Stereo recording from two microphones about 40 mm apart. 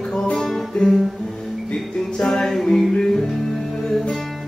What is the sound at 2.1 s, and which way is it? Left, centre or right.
Music, centre.